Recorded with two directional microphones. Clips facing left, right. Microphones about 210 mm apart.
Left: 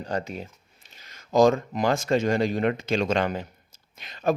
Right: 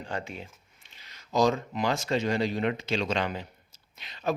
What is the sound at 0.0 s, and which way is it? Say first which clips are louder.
A man's voice: left 5 dB; 40° left (ahead or behind).